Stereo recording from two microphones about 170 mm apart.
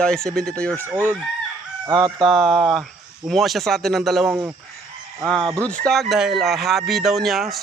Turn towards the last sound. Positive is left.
turn(degrees=0)  # may be behind; listen again after turning